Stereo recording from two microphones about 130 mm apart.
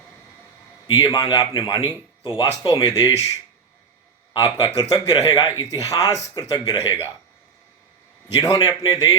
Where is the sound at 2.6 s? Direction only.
35° left (ahead or behind).